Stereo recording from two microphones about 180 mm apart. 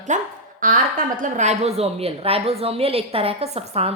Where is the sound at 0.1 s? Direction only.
45° right (ahead or behind).